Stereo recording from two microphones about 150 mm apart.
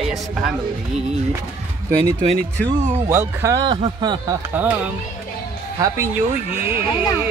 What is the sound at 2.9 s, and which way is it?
Speech, 15° right (ahead or behind).